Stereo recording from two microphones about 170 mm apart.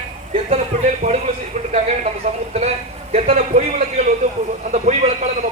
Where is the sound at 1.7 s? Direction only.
40° right (ahead or behind).